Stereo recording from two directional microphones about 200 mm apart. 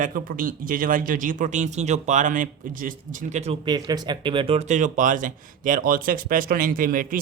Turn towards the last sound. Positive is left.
turn(degrees=-45)  # may be behind; listen again after turning